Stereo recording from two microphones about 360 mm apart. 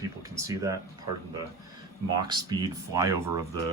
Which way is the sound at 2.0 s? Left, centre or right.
Centre.